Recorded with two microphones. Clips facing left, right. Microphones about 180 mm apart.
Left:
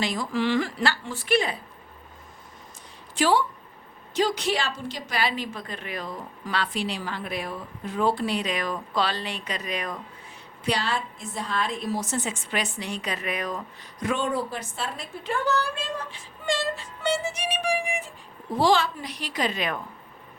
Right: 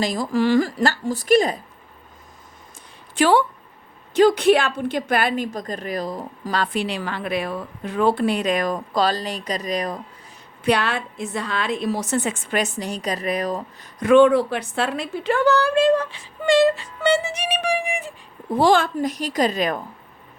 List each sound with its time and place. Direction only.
0.0 s a woman's voice: 40° right (ahead or behind)
3.2 s a woman's voice: 60° right (ahead or behind)
6.8 s a woman's voice: 65° right (ahead or behind); by 10.0 s 35° right (ahead or behind)
10.6 s a woman's voice: 60° right (ahead or behind); by 13.7 s 35° right (ahead or behind)
14.0 s a woman's voice: 65° right (ahead or behind)
18.5 s a woman's voice: 50° right (ahead or behind)